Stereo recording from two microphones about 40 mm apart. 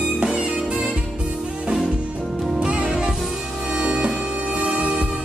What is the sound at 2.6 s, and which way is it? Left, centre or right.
Music, right.